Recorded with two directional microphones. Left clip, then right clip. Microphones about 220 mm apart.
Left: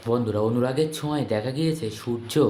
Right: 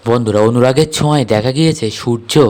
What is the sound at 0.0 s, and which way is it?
A man's voice, 45° right (ahead or behind).